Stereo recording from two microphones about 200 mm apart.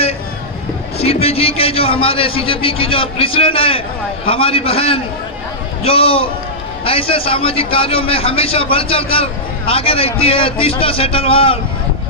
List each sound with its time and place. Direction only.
0.9 s a man's voice: 30° left (ahead or behind)